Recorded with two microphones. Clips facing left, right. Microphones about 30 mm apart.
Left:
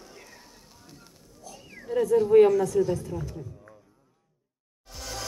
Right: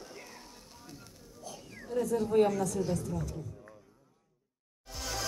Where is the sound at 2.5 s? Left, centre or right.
Left.